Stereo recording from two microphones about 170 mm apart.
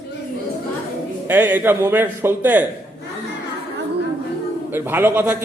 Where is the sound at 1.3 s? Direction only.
10° right (ahead or behind).